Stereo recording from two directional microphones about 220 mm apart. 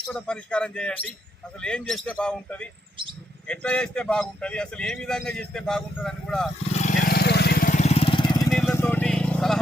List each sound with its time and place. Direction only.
0.1 s a man's voice: 5° left (ahead or behind)
6.7 s vehicle: 35° left (ahead or behind); by 8.4 s 20° left (ahead or behind)
8.4 s vehicle: 5° left (ahead or behind)